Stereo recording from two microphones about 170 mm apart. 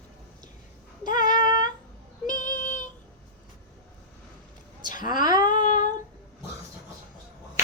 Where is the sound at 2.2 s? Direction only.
50° left (ahead or behind).